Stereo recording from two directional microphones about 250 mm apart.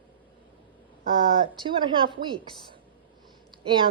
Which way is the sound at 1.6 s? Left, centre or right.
Centre.